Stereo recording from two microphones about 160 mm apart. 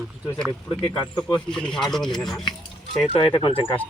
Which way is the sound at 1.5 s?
5° left (ahead or behind).